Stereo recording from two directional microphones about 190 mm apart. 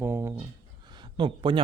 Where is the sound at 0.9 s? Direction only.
25° right (ahead or behind).